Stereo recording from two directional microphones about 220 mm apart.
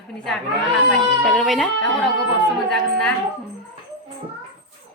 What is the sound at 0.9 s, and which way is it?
A woman's voice, 5° left (ahead or behind).